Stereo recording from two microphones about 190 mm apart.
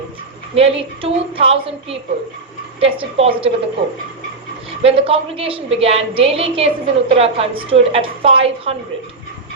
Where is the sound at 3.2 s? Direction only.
30° right (ahead or behind).